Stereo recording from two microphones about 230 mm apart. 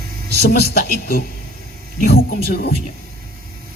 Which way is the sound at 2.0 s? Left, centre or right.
Left.